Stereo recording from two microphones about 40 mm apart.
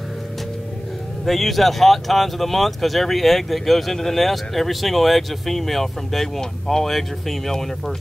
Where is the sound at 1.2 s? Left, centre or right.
Centre.